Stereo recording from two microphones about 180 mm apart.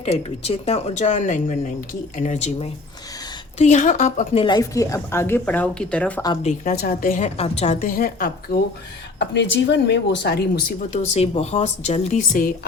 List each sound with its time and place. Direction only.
0.0 s speech: 35° left (ahead or behind)
4.4 s a woman's voice: 20° left (ahead or behind)
6.4 s a woman's voice: 50° left (ahead or behind)
7.3 s a woman's voice: 35° left (ahead or behind); by 8.3 s 50° left (ahead or behind)
9.1 s speech: 80° left; by 11.0 s 60° left (ahead or behind)
11.0 s speech: 35° left (ahead or behind)